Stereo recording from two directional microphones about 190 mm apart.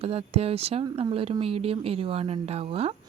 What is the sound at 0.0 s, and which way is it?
Speech, 30° right (ahead or behind).